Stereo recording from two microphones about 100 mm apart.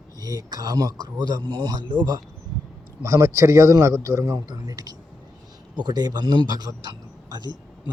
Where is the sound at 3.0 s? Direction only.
30° right (ahead or behind).